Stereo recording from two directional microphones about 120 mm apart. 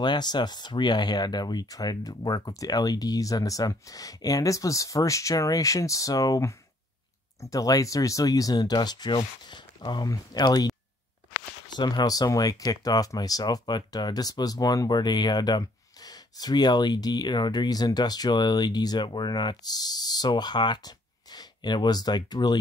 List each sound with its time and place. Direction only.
0.0 s speech: 35° left (ahead or behind)
11.7 s speech: 35° left (ahead or behind)